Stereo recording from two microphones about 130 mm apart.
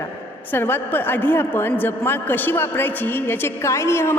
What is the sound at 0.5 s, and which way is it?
Speech, 15° left (ahead or behind).